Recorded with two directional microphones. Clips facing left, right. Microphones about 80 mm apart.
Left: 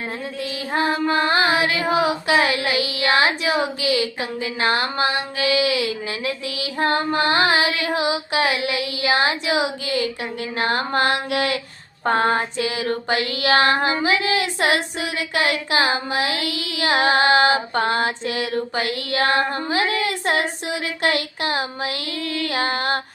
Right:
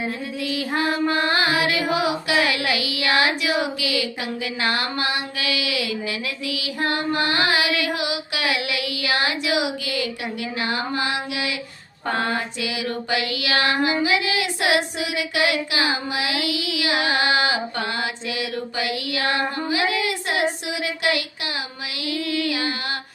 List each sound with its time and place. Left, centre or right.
0.7 s female singing: left
4.6 s child singing: left
10.6 s mantra: left
12.0 s child singing: left